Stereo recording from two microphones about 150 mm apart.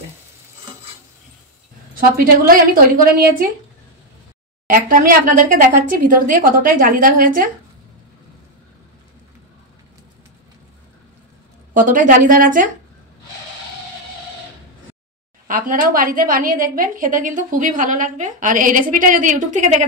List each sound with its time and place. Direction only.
2.0 s a woman's voice: 70° right (ahead or behind)
4.6 s a woman's voice: 70° right (ahead or behind)
11.7 s a woman's voice: 60° right (ahead or behind)
15.4 s a woman's voice: 65° right (ahead or behind)